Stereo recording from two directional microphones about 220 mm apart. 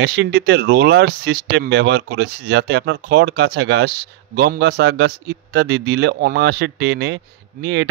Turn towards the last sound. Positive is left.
turn(degrees=-55)  # may be behind; listen again after turning